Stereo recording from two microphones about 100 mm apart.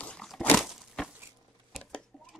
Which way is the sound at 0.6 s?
5° right (ahead or behind).